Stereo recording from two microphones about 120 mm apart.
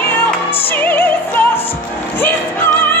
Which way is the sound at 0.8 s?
15° left (ahead or behind).